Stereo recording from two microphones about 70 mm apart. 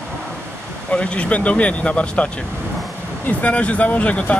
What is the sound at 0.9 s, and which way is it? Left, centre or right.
Speech, centre.